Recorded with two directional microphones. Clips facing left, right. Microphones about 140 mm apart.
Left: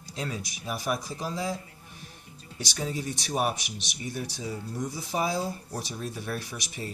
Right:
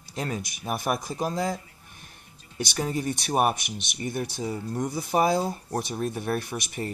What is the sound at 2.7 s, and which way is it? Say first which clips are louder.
Speech: right 4 dB; 55° right (ahead or behind).